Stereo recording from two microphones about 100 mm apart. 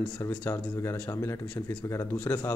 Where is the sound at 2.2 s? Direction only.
20° left (ahead or behind).